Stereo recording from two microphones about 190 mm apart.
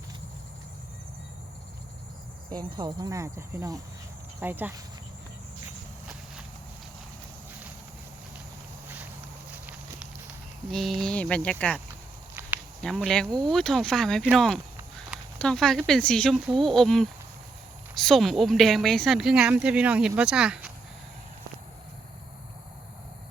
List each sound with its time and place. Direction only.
2.5 s speech: 20° right (ahead or behind)
9.5 s walk: 10° right (ahead or behind)
10.7 s speech: centre (ahead or behind)
12.4 s walk: 10° right (ahead or behind)
12.8 s speech: centre (ahead or behind)